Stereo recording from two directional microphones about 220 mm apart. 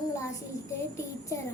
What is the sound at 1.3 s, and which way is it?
Speech, 15° left (ahead or behind).